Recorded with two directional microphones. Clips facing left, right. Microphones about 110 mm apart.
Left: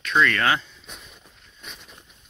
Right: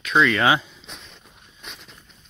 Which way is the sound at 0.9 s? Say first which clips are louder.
Right 2 dB; 5° left (ahead or behind).